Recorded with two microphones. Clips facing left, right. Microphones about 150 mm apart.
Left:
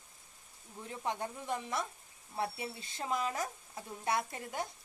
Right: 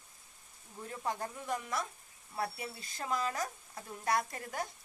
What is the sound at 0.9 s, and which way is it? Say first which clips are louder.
Speech: even; 20° left (ahead or behind).